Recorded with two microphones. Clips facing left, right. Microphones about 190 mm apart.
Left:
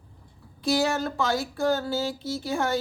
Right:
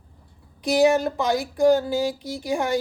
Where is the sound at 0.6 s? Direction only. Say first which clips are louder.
Right 6 dB; 15° right (ahead or behind).